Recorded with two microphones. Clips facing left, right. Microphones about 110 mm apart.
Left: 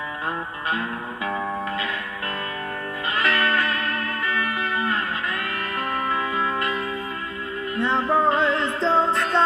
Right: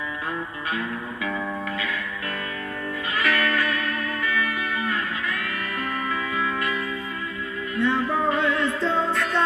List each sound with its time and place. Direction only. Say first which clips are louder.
3.3 s music: left 1 dB; 30° left (ahead or behind)
6.0 s music: left 2 dB; 30° left (ahead or behind)